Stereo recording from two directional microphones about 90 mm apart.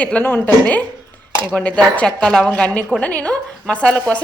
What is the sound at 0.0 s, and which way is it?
Speech, 15° left (ahead or behind).